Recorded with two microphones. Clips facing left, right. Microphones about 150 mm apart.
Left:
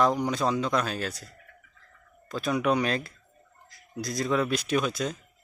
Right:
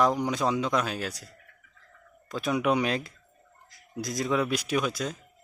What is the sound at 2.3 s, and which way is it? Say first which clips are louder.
A man's voice: even; 15° right (ahead or behind).